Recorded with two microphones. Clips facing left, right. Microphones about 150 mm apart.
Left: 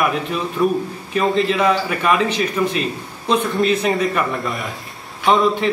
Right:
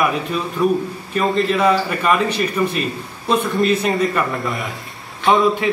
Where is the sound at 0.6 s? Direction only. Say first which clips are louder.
Right 1 dB; centre (ahead or behind).